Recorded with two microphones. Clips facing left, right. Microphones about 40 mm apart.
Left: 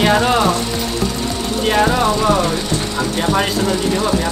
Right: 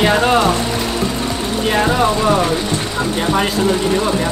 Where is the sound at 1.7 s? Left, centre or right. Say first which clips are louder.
Even; centre.